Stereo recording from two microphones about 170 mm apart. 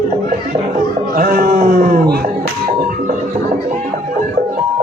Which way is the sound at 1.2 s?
55° right (ahead or behind).